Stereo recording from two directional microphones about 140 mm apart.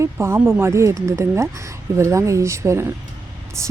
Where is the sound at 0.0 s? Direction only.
20° right (ahead or behind).